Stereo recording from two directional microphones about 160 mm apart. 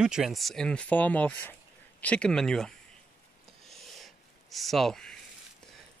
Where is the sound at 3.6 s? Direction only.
Centre (ahead or behind).